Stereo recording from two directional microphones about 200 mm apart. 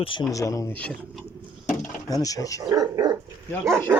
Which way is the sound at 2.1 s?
15° left (ahead or behind).